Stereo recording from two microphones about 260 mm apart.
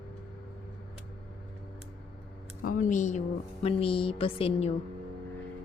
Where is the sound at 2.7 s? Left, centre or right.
Left.